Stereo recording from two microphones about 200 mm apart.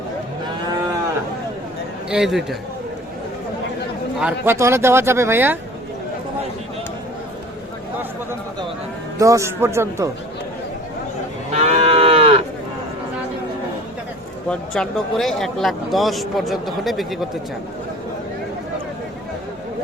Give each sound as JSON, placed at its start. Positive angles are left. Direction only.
{"t": 2.0, "sound": "speech", "side_deg": -5}
{"t": 4.2, "sound": "speech", "side_deg": -10}
{"t": 9.1, "sound": "speech", "side_deg": -15}
{"t": 11.5, "sound": "moo", "side_deg": -30}
{"t": 14.5, "sound": "speech", "side_deg": 5}